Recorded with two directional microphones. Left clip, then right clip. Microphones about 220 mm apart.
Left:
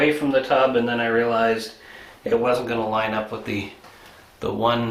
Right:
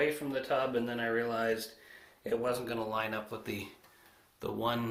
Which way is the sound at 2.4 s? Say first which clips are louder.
Left 13 dB; 40° right (ahead or behind).